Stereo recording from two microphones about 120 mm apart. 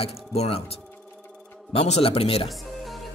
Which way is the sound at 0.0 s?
55° left (ahead or behind).